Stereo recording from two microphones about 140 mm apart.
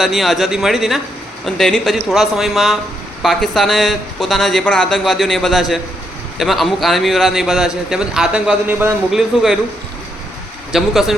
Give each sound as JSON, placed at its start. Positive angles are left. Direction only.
{"t": 0.0, "sound": "speech", "side_deg": 0}
{"t": 10.7, "sound": "speech", "side_deg": 0}